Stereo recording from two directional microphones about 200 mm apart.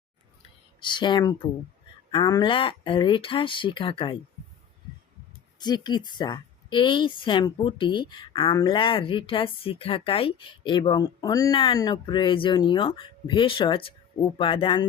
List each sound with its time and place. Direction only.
0.8 s a woman's voice: 25° left (ahead or behind)
5.5 s a woman's voice: 20° left (ahead or behind)